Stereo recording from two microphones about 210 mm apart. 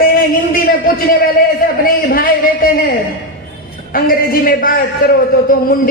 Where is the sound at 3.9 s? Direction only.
45° left (ahead or behind).